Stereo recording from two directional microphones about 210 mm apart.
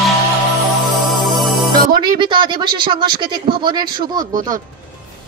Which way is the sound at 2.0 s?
20° right (ahead or behind).